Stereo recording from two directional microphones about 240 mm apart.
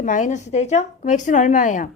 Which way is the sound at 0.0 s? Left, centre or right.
Left.